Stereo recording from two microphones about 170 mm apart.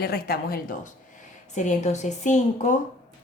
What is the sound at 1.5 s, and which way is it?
A woman's voice, 45° left (ahead or behind).